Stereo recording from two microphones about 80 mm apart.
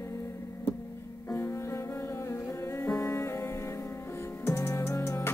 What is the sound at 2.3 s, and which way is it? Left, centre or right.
Music, left.